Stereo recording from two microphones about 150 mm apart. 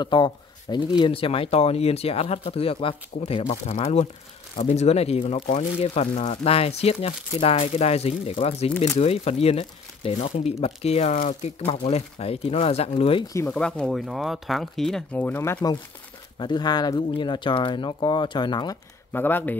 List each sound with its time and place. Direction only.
0.0 s speech: 30° left (ahead or behind)
13.5 s speech: 5° left (ahead or behind)
16.3 s speech: 30° left (ahead or behind)
19.1 s speech: 15° left (ahead or behind)